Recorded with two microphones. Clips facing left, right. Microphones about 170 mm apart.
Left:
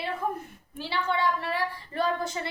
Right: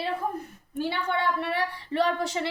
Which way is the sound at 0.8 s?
55° right (ahead or behind).